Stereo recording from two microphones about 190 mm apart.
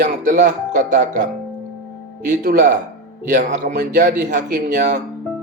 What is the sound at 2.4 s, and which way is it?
Speech, 45° right (ahead or behind).